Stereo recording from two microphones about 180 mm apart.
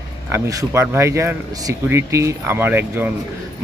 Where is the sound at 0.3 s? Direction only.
15° right (ahead or behind).